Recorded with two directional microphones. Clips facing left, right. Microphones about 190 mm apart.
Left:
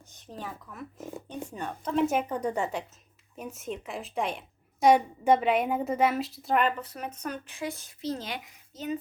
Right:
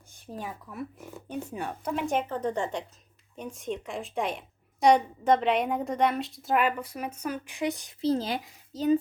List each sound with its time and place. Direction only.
0.2 s speech: 10° right (ahead or behind)
2.0 s a woman's voice: 10° left (ahead or behind); by 7.9 s 15° right (ahead or behind)
8.0 s a child's voice: 30° right (ahead or behind)